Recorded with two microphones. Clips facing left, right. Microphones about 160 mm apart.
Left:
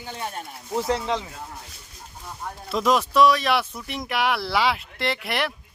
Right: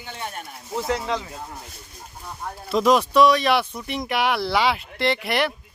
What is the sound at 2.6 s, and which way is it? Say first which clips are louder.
Speech: right 3 dB; centre (ahead or behind).